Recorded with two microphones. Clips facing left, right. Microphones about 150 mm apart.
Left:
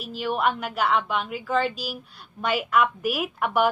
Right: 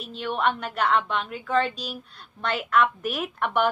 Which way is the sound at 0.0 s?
5° left (ahead or behind).